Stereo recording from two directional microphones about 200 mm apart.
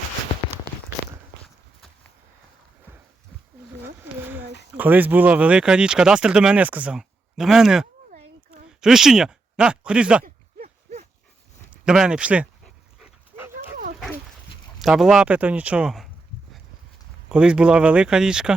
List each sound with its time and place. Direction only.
3.8 s a sound: 10° right (ahead or behind)
4.7 s speech: 10° right (ahead or behind)
10.2 s a sound: 40° right (ahead or behind)
11.9 s dog: 5° right (ahead or behind)
14.8 s speech: centre (ahead or behind)
17.2 s speech: 5° right (ahead or behind)